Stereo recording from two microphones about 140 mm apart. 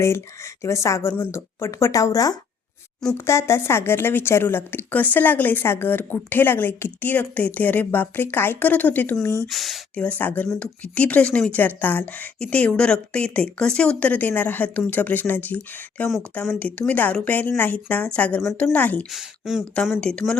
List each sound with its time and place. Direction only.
0.6 s speech: 20° left (ahead or behind)
9.5 s speech: centre (ahead or behind)
19.1 s speech: 5° right (ahead or behind)